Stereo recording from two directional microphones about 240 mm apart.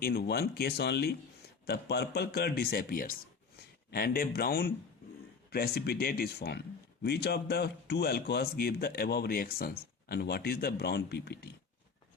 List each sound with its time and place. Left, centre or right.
0.0 s speech: left